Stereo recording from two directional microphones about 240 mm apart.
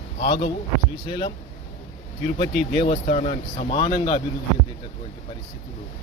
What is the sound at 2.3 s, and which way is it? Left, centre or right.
Speech, left.